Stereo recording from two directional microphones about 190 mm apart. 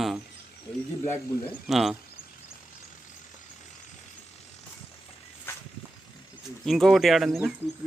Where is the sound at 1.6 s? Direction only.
Centre (ahead or behind).